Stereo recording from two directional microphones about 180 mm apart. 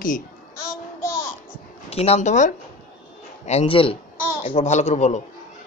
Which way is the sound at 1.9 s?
35° left (ahead or behind).